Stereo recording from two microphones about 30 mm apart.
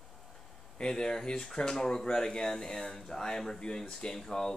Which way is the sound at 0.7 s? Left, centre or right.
Left.